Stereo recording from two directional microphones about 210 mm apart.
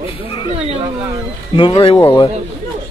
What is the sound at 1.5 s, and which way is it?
Speech, 25° left (ahead or behind).